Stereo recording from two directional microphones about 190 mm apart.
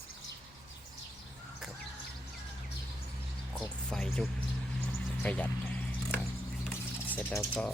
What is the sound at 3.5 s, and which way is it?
Music, 5° left (ahead or behind).